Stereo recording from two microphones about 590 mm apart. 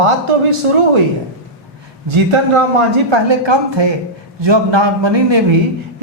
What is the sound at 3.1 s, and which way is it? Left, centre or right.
Speech, right.